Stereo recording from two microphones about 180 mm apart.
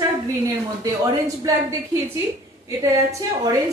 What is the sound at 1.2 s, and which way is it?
A woman's voice, 15° right (ahead or behind).